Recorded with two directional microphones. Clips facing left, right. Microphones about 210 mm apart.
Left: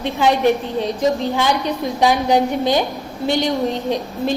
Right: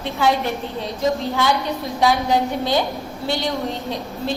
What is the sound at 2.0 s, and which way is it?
Speech, 15° left (ahead or behind).